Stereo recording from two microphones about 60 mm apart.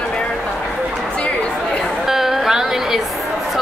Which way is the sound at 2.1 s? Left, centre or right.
Centre.